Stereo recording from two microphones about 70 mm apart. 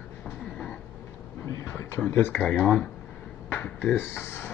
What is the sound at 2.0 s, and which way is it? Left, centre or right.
Speech, left.